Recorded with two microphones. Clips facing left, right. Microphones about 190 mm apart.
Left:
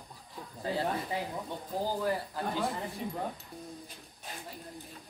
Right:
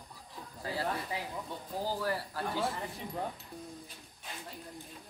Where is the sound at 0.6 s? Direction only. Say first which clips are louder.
Left 3 dB; 20° left (ahead or behind).